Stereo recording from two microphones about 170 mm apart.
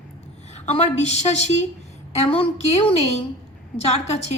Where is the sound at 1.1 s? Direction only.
40° left (ahead or behind).